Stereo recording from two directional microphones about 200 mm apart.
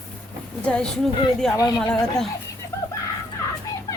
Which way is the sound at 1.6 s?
15° left (ahead or behind).